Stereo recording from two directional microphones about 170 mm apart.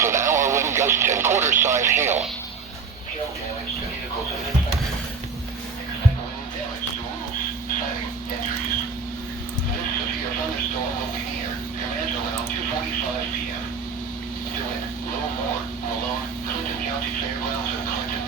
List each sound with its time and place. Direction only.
0.0 s radio: 15° right (ahead or behind)
1.6 s speech: 15° right (ahead or behind)